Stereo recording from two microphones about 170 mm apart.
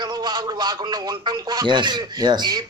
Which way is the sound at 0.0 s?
25° right (ahead or behind).